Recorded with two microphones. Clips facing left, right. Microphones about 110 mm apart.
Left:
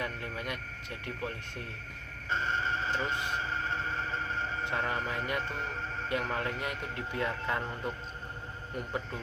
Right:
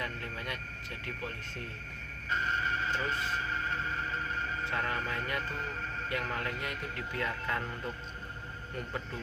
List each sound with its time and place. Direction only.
0.0 s speech: 20° left (ahead or behind)
2.3 s a man's voice: 30° left (ahead or behind)